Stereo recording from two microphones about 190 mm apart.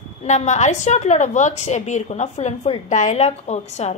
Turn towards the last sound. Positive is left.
turn(degrees=35)  # may be behind; listen again after turning